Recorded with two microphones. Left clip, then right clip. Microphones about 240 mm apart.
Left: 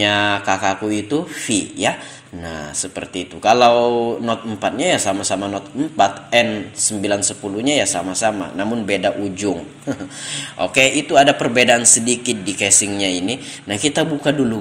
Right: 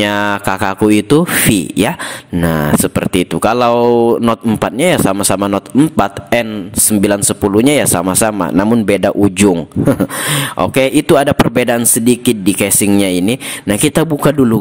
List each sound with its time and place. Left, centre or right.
0.0 s speech: right